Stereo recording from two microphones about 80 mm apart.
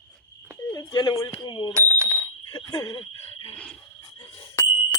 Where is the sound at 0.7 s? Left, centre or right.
Left.